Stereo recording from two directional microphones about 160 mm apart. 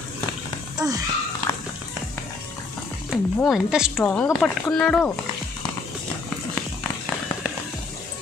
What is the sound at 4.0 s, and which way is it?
A woman's voice, 15° left (ahead or behind).